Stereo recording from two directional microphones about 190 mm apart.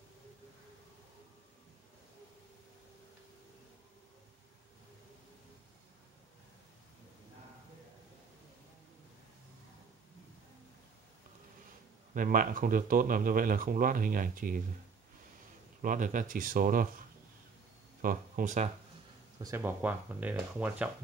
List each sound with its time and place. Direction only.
12.1 s speech: 45° right (ahead or behind)
15.8 s speech: 45° right (ahead or behind)
18.0 s speech: 45° right (ahead or behind)
19.4 s speech: 15° right (ahead or behind)